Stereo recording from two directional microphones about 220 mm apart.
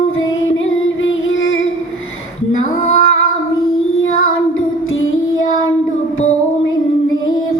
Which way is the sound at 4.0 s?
65° left (ahead or behind).